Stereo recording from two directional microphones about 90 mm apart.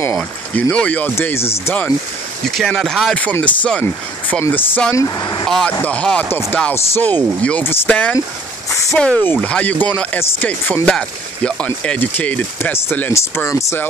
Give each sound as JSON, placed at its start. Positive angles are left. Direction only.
{"t": 0.0, "sound": "speech", "side_deg": 20}
{"t": 1.1, "sound": "speech", "side_deg": 25}
{"t": 2.4, "sound": "speech", "side_deg": 0}
{"t": 3.2, "sound": "speech", "side_deg": 15}
{"t": 4.9, "sound": "speech", "side_deg": 40}
{"t": 5.7, "sound": "speech", "side_deg": 15}
{"t": 7.9, "sound": "speech", "side_deg": 15}
{"t": 9.2, "sound": "speech", "side_deg": 25}
{"t": 13.5, "sound": "speech", "side_deg": 35}